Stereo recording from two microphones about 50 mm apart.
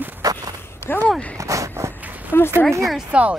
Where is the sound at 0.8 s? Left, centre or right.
Left.